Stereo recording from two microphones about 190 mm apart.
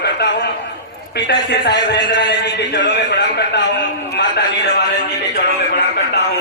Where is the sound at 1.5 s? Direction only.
60° left (ahead or behind).